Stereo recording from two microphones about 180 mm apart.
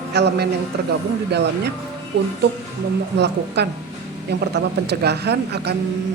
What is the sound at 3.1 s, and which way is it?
A woman's voice, 70° right (ahead or behind).